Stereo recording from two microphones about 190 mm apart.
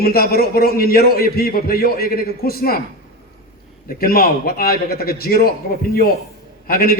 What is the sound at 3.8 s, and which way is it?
A man's voice, 50° left (ahead or behind).